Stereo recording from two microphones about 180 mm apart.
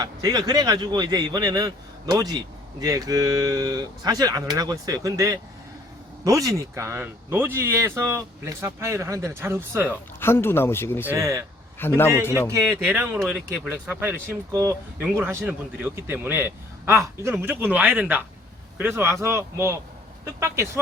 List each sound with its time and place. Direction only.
0.0 s speech: 20° right (ahead or behind)
10.2 s speech: 15° left (ahead or behind)
11.0 s speech: 15° right (ahead or behind)
11.8 s speech: 10° left (ahead or behind)
12.9 s speech: 10° right (ahead or behind)